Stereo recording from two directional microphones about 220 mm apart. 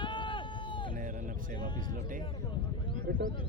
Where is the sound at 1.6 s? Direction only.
20° left (ahead or behind).